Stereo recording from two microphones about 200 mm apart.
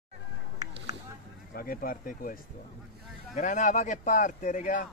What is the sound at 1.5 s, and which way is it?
Speech, 45° left (ahead or behind).